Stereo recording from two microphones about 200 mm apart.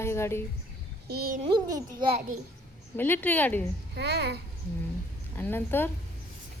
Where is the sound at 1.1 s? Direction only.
50° right (ahead or behind).